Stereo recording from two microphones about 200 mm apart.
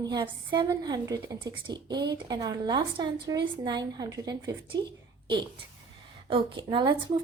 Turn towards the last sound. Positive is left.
turn(degrees=-25)  # may be behind; listen again after turning